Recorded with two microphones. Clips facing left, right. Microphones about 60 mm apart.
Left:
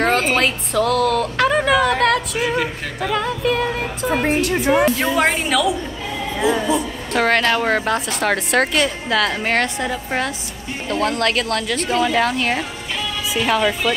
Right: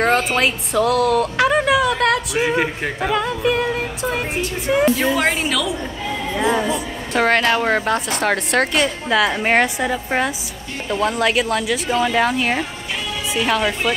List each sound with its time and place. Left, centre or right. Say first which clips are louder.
0.0 s a woman's voice: even; centre
2.3 s speech: right 2 dB; right
3.1 s a woman's voice: even; centre
4.4 s speech: left 5 dB; left
4.6 s a woman's voice: right 2 dB; centre
6.7 s a woman's voice: left 2 dB; centre